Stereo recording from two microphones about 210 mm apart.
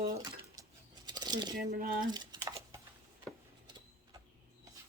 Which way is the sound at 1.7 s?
45° right (ahead or behind).